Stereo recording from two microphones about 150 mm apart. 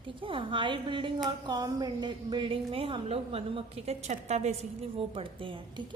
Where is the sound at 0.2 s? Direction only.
35° right (ahead or behind).